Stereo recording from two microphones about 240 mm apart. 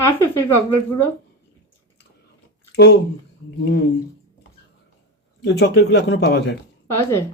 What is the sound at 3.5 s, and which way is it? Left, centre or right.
Speech, left.